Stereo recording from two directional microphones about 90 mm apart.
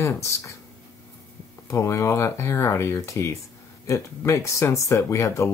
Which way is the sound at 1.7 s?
30° left (ahead or behind).